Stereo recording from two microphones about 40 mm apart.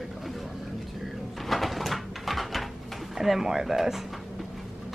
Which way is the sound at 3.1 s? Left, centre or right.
Centre.